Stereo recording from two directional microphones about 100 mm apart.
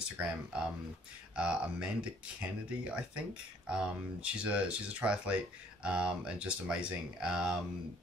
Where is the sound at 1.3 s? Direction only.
10° right (ahead or behind).